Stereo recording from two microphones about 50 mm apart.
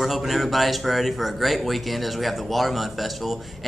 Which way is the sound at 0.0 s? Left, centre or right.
Centre.